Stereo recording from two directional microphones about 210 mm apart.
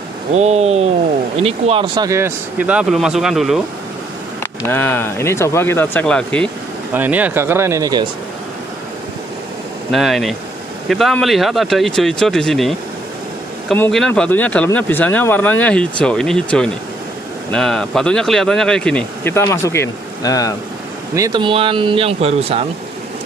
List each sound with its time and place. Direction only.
0.4 s speech: 30° right (ahead or behind)
2.0 s speech: 10° right (ahead or behind)
4.4 s speech: 10° left (ahead or behind)
6.9 s speech: 10° right (ahead or behind)
9.8 s speech: centre (ahead or behind); by 20.5 s 15° left (ahead or behind)
21.1 s speech: 20° right (ahead or behind)